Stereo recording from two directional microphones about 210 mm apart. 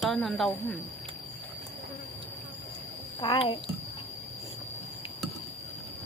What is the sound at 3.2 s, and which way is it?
Speech, 20° left (ahead or behind).